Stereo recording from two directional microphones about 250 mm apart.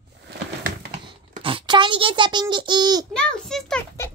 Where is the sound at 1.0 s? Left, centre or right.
Centre.